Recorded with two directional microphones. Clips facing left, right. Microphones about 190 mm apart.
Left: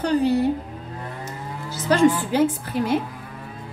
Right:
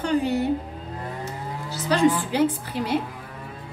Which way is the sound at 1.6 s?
50° left (ahead or behind).